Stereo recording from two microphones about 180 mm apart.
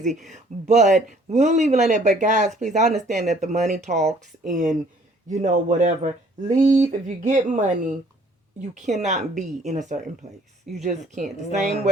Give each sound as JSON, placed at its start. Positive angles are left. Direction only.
{"t": 0.7, "sound": "speech", "side_deg": -40}
{"t": 9.0, "sound": "speech", "side_deg": -40}
{"t": 10.2, "sound": "speech", "side_deg": -20}
{"t": 10.8, "sound": "speech", "side_deg": -45}